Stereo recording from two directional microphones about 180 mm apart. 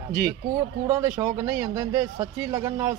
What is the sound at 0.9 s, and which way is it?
Speech, 15° right (ahead or behind).